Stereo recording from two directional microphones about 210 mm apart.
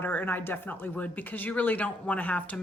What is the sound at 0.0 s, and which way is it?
Speech, 10° left (ahead or behind).